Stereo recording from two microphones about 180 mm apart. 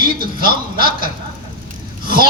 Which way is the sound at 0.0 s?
55° right (ahead or behind).